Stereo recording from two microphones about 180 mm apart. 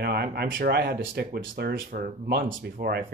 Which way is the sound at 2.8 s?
65° right (ahead or behind).